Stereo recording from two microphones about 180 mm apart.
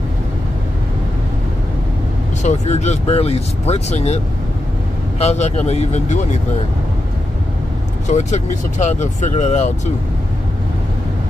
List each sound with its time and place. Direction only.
2.4 s speech: 40° left (ahead or behind)
5.2 s speech: 35° left (ahead or behind)
8.1 s speech: 40° left (ahead or behind)